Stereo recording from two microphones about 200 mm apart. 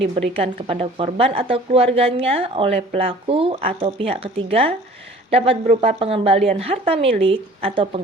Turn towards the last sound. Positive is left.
turn(degrees=-30)  # may be behind; listen again after turning